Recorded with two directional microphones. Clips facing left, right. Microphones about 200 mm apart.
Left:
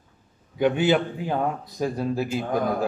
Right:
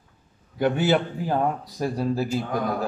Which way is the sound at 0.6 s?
5° right (ahead or behind).